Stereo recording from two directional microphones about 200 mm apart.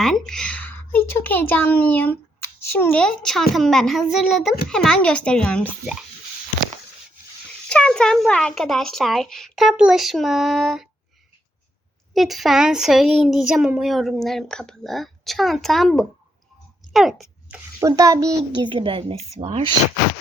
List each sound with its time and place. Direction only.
0.0 s a child's voice: centre (ahead or behind)
7.7 s speech: 5° left (ahead or behind)
12.1 s speech: centre (ahead or behind)
16.9 s a sound: centre (ahead or behind)
17.7 s a child's voice: 15° right (ahead or behind); by 19.7 s 35° right (ahead or behind)